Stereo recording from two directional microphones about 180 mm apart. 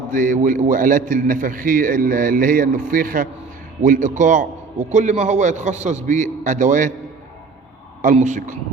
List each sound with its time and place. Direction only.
0.1 s a man's voice: 45° right (ahead or behind)
8.0 s a man's voice: 40° right (ahead or behind)